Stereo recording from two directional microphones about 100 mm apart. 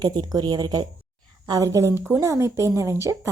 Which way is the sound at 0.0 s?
45° right (ahead or behind).